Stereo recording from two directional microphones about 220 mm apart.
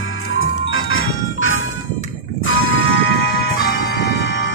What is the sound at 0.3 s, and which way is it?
Music, 65° left (ahead or behind).